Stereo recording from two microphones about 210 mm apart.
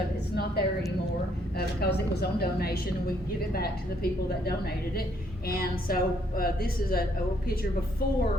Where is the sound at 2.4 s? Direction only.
50° left (ahead or behind).